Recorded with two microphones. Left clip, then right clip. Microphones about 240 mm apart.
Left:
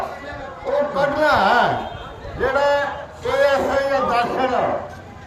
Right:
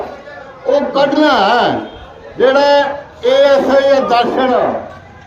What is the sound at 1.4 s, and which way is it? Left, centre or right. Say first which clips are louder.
A man's voice: right 5 dB; right.